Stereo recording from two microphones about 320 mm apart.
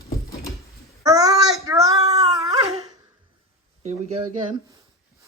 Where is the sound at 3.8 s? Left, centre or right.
Right.